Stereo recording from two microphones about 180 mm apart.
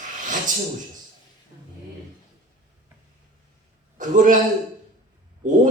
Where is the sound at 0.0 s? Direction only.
45° right (ahead or behind).